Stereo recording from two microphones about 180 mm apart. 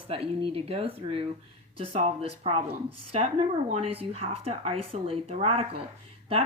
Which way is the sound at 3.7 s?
30° right (ahead or behind).